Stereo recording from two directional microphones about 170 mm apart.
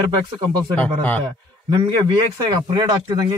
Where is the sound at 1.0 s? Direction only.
10° left (ahead or behind).